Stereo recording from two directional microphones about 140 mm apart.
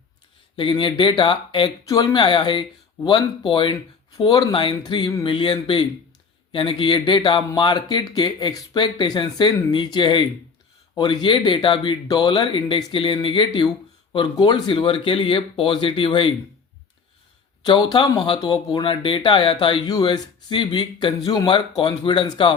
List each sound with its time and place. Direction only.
0.5 s speech: 35° left (ahead or behind)
17.6 s speech: 30° left (ahead or behind)